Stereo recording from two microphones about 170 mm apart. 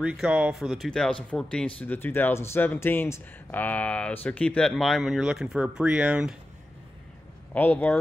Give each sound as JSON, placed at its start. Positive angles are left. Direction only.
{"t": 0.0, "sound": "speech", "side_deg": -5}
{"t": 7.5, "sound": "speech", "side_deg": 10}